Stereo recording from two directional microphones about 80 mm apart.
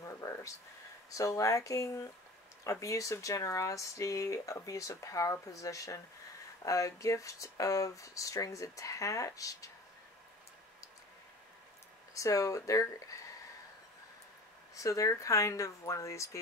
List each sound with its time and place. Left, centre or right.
0.0 s a sound: left
1.1 s speech: left
12.1 s speech: left
14.8 s speech: left